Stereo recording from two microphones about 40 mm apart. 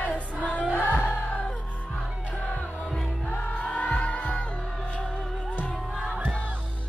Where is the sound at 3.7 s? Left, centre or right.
Left.